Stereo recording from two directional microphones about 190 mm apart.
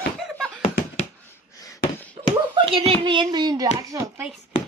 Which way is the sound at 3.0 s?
25° right (ahead or behind).